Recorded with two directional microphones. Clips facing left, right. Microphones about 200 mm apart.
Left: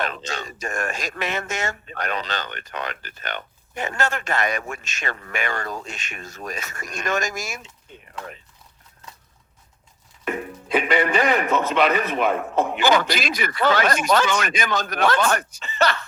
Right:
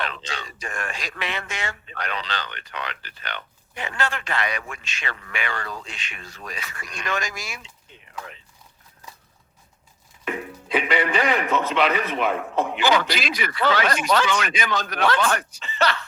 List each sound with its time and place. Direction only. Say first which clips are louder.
0.0 s speech: left 3 dB; 45° left (ahead or behind)
10.2 s speech: left 2 dB; 45° left (ahead or behind)